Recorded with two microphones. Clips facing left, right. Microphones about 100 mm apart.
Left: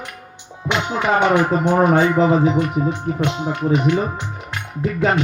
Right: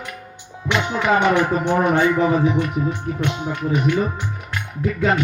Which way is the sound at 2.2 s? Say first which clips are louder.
Left 2 dB; 20° left (ahead or behind).